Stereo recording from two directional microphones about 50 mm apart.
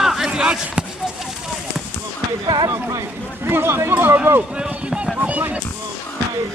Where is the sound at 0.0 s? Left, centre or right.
Centre.